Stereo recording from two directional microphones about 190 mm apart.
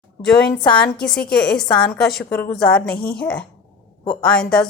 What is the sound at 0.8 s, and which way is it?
A woman's voice, 5° left (ahead or behind).